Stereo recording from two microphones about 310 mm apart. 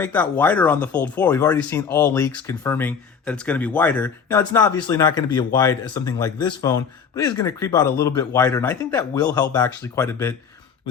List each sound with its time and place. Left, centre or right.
0.0 s speech: centre